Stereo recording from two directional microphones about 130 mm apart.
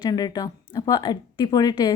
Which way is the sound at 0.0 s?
30° left (ahead or behind).